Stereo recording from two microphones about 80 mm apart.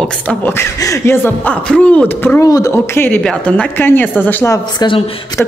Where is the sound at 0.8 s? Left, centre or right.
Left.